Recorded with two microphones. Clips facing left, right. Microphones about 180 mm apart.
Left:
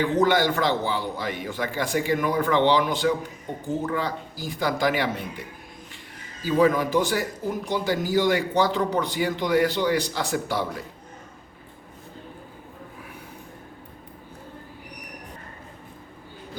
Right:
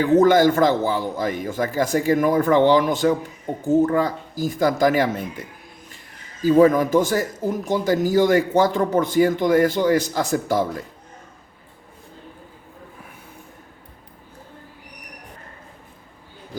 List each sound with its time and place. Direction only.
0.0 s a man's voice: 45° right (ahead or behind)
6.4 s a man's voice: 45° right (ahead or behind)